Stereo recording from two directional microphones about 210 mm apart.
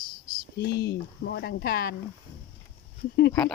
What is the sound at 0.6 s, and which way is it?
Speech, 50° left (ahead or behind).